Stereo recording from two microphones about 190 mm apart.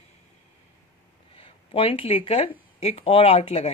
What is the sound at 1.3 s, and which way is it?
Speech, 30° left (ahead or behind).